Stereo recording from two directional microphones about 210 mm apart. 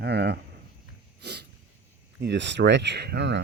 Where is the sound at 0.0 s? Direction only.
50° right (ahead or behind).